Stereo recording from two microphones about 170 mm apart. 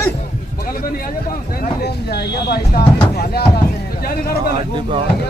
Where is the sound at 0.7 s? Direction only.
55° left (ahead or behind).